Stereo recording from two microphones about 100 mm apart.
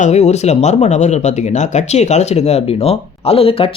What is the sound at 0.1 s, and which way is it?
Speech, 90° left.